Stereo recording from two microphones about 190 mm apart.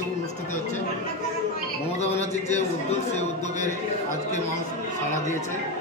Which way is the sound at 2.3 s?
35° left (ahead or behind).